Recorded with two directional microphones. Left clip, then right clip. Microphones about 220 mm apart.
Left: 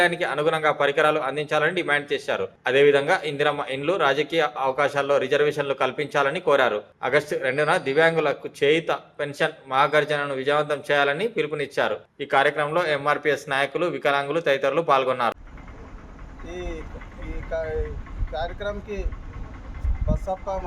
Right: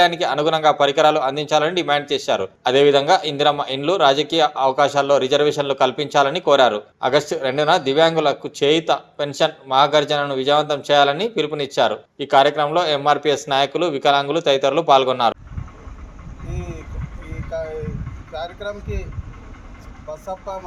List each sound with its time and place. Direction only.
0.0 s speech: 20° right (ahead or behind)
18.3 s speech: centre (ahead or behind)